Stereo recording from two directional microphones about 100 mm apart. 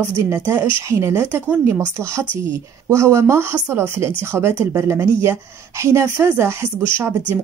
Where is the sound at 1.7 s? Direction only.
25° right (ahead or behind).